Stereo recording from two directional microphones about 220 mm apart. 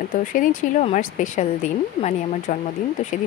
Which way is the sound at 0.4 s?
35° left (ahead or behind).